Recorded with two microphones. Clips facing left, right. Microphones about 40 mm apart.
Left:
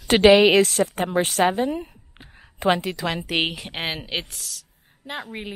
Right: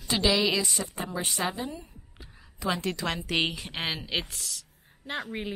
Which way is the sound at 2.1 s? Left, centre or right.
Left.